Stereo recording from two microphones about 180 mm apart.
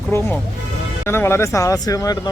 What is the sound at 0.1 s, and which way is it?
Speech, 10° left (ahead or behind).